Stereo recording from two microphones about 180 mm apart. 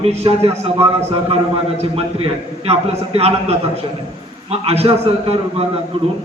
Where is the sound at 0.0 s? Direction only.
35° right (ahead or behind).